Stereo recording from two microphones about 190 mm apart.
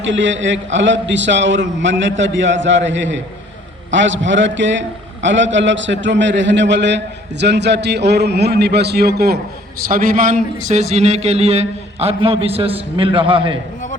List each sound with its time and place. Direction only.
0.0 s a man's voice: 75° right (ahead or behind); by 13.6 s 25° right (ahead or behind)